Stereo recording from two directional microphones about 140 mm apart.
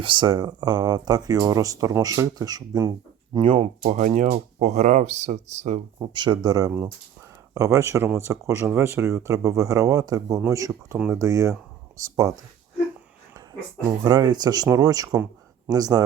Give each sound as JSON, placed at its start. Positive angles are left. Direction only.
{"t": 0.0, "sound": "speech", "side_deg": -35}
{"t": 3.4, "sound": "speech", "side_deg": -45}
{"t": 6.0, "sound": "speech", "side_deg": -35}
{"t": 14.0, "sound": "speech", "side_deg": -30}